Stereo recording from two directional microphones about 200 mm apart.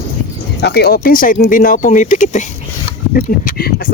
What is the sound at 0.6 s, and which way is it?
Speech, 55° left (ahead or behind).